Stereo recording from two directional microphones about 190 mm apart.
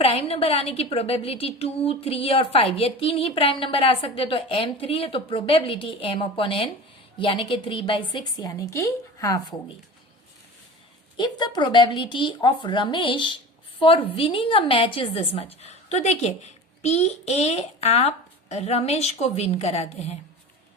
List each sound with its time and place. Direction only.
0.0 s speech: 30° left (ahead or behind)
11.2 s speech: 20° left (ahead or behind)